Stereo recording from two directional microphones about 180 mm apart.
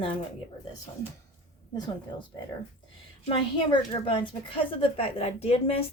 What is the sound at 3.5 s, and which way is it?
A woman's voice, 25° left (ahead or behind).